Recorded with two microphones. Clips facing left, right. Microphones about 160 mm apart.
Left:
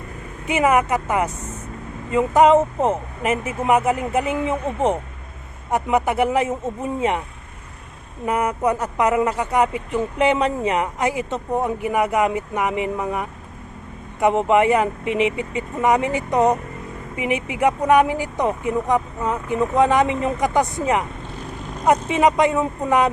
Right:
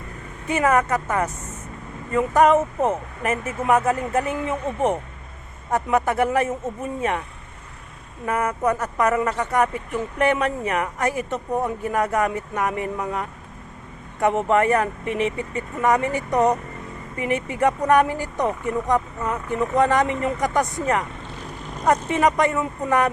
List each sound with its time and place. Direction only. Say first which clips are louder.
0.4 s speech: left 2 dB; 15° left (ahead or behind)
8.2 s speech: left 2 dB; 15° left (ahead or behind)